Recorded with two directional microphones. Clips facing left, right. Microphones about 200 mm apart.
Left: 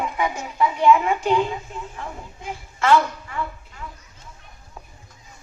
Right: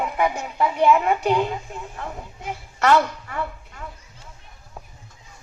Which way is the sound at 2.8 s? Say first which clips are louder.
Even; 45° right (ahead or behind).